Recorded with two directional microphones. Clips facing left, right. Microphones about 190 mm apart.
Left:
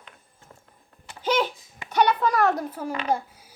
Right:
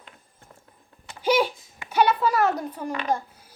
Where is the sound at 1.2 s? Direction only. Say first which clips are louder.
Right 3 dB; 10° right (ahead or behind); by 3.2 s 10° left (ahead or behind).